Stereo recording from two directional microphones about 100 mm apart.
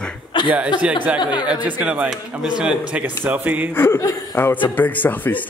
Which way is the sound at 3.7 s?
20° left (ahead or behind).